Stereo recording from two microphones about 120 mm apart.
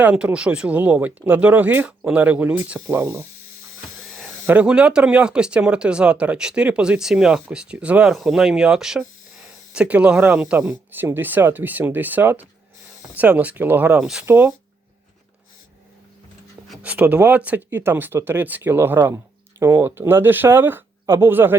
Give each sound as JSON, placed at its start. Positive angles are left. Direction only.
{"t": 0.0, "sound": "speech", "side_deg": -10}
{"t": 4.4, "sound": "speech", "side_deg": -10}
{"t": 14.3, "sound": "speech", "side_deg": -20}
{"t": 16.8, "sound": "speech", "side_deg": -10}